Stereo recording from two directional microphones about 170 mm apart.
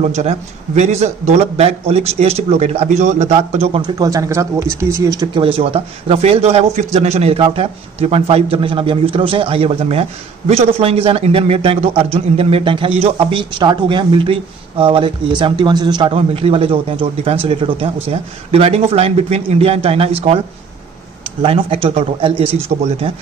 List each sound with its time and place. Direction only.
0.0 s a man's voice: 40° right (ahead or behind)
3.8 s a man's voice: 20° right (ahead or behind)
21.4 s a man's voice: 30° right (ahead or behind)